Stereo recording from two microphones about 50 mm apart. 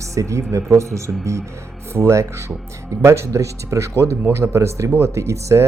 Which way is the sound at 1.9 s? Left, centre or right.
Right.